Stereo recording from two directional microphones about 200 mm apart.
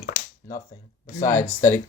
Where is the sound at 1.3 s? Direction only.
15° left (ahead or behind).